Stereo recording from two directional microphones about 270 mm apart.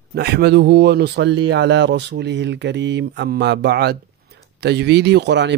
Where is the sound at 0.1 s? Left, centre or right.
Right.